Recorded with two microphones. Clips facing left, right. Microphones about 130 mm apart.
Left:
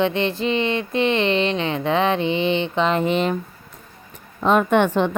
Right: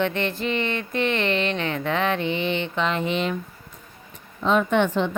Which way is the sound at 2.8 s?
40° left (ahead or behind).